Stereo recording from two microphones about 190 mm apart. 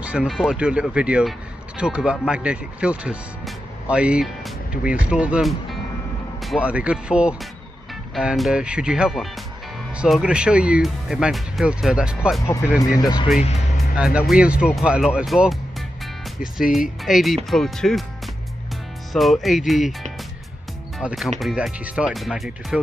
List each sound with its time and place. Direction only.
0.0 s speech: 5° right (ahead or behind)
12.4 s speech: 15° left (ahead or behind)
13.0 s speech: 25° left (ahead or behind)
13.9 s speech: 5° right (ahead or behind)
17.0 s speech: centre (ahead or behind)